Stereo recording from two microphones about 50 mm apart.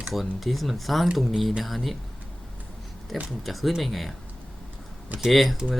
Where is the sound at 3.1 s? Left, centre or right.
Centre.